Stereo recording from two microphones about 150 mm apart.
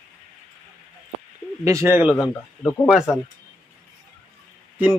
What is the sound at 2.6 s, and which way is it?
Speech, centre (ahead or behind).